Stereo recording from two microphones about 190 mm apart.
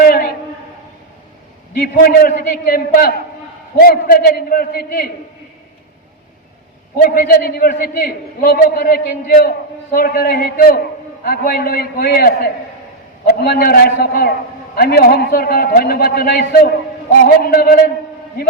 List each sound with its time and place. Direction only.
0.0 s a sound: 50° left (ahead or behind)
1.7 s a man's voice: 50° left (ahead or behind)
6.9 s a man's voice: 50° left (ahead or behind)